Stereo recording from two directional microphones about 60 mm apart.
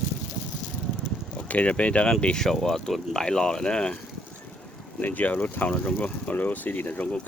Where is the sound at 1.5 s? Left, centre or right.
Left.